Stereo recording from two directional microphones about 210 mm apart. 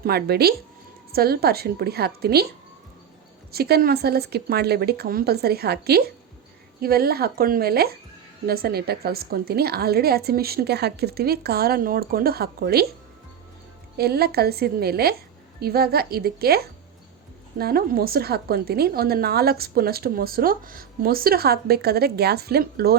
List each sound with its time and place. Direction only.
0.0 s a woman's voice: 50° right (ahead or behind)
3.5 s a woman's voice: 45° right (ahead or behind)
13.9 s a woman's voice: 50° right (ahead or behind)